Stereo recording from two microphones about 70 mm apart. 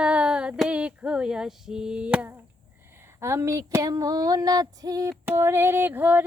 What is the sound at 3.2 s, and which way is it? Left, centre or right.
Female singing, right.